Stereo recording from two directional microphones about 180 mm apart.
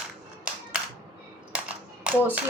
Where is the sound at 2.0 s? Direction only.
10° right (ahead or behind).